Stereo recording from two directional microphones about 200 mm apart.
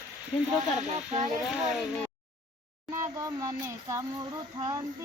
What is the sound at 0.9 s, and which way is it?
Speech, 35° right (ahead or behind).